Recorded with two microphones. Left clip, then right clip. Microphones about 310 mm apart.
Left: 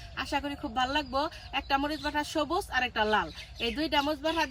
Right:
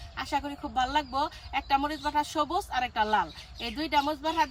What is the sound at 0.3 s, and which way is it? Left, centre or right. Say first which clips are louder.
Speech: right 2 dB; centre.